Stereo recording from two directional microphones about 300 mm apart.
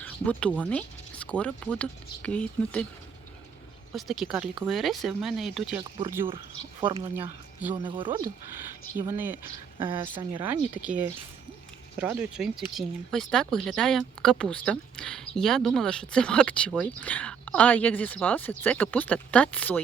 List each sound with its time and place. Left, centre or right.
0.0 s speech: centre
3.9 s speech: centre
6.0 s speech: centre
10.4 s speech: centre